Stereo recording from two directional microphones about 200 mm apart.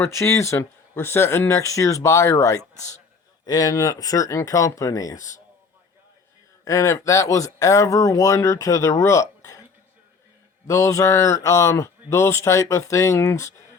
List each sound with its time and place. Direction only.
0.0 s speech: 15° left (ahead or behind)
6.7 s speech: 15° left (ahead or behind)
10.7 s speech: 15° left (ahead or behind)